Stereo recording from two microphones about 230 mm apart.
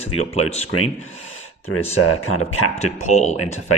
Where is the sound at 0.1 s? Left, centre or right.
Left.